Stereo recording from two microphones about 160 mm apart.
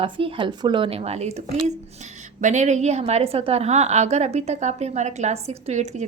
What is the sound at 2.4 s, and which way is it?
A woman's voice, 50° right (ahead or behind).